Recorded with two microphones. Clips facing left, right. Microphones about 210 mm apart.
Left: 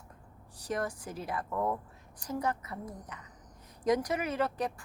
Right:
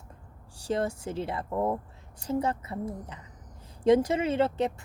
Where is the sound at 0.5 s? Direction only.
30° right (ahead or behind).